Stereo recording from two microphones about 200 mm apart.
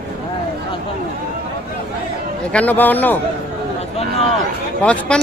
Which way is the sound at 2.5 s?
5° left (ahead or behind).